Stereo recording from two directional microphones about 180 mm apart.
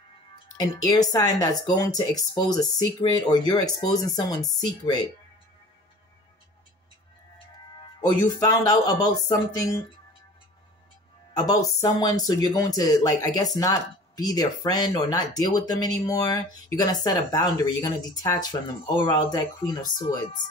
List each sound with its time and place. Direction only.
0.6 s speech: 20° left (ahead or behind)
8.1 s speech: 20° left (ahead or behind)
11.3 s speech: 20° left (ahead or behind)